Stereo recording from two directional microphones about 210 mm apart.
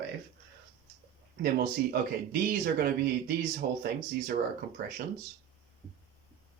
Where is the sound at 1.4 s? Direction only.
45° right (ahead or behind).